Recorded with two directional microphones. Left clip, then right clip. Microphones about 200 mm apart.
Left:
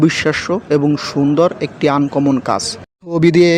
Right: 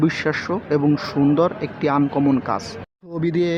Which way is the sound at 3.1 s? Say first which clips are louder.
Left 10 dB; 40° left (ahead or behind).